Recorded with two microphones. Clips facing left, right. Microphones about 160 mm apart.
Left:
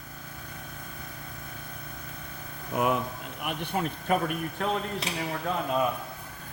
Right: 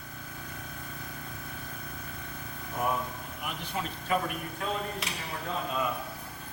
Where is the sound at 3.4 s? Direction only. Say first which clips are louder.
Left 6 dB; 60° left (ahead or behind).